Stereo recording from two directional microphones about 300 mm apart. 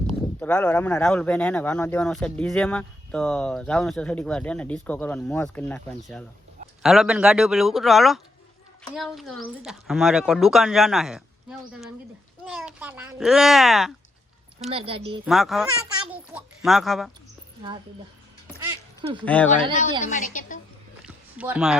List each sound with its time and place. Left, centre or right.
0.3 s speech: centre
14.7 s a woman's voice: centre
15.2 s speech: centre
19.2 s speech: centre
19.7 s a woman's voice: left
21.3 s speech: centre